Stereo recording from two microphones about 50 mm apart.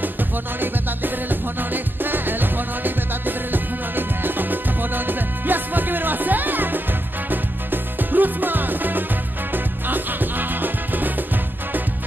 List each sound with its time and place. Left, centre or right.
0.0 s music: right